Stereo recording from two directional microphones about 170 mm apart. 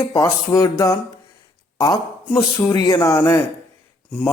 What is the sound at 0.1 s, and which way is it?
Speech, 20° left (ahead or behind).